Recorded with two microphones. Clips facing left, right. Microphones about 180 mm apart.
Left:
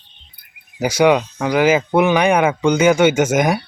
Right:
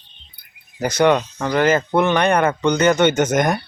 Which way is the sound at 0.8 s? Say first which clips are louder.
Left 2 dB; 10° left (ahead or behind).